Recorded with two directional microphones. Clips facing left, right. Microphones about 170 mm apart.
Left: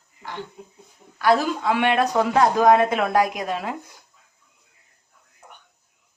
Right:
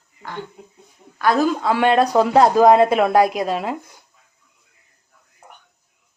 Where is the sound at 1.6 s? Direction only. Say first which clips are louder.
Right 4 dB; 35° right (ahead or behind).